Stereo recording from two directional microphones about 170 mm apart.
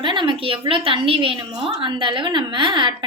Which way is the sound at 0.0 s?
30° right (ahead or behind).